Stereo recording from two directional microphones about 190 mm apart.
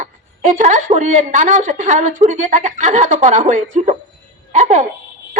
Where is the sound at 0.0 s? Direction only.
40° right (ahead or behind).